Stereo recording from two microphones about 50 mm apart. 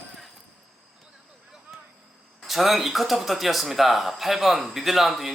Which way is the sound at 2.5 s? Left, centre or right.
Centre.